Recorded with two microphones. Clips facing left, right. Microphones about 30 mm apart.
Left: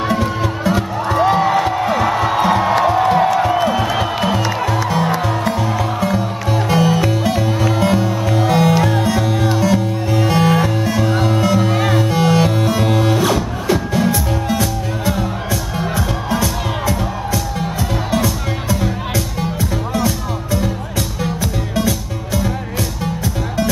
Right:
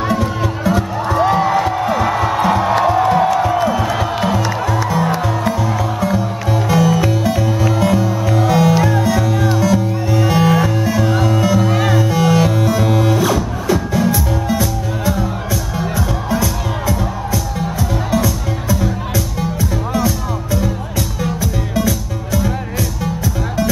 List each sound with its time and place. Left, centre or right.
0.0 s music: centre
4.8 s music: left
11.1 s music: left
11.7 s music: centre
18.1 s music: left
21.7 s music: left